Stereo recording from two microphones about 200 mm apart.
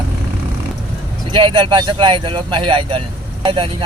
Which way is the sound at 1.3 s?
25° right (ahead or behind).